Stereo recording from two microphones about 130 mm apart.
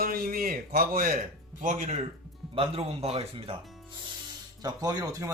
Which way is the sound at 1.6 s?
80° right.